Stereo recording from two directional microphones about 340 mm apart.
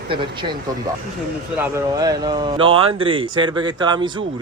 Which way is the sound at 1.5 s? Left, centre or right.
Centre.